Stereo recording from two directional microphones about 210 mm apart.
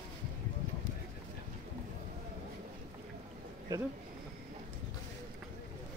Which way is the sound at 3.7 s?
15° right (ahead or behind).